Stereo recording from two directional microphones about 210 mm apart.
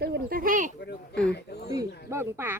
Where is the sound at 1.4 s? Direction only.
50° left (ahead or behind).